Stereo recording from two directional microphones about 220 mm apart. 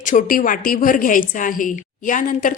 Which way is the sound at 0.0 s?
35° left (ahead or behind).